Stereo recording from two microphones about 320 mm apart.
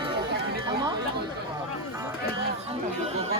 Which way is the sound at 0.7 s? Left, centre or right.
Centre.